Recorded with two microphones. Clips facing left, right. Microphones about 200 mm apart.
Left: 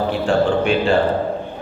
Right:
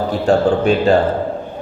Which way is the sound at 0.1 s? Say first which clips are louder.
Right 5 dB; 40° right (ahead or behind).